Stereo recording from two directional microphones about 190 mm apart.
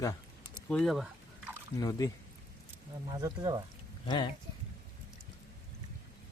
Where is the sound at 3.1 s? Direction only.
20° right (ahead or behind).